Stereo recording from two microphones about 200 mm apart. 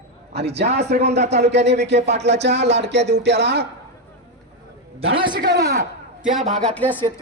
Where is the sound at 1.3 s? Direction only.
55° right (ahead or behind).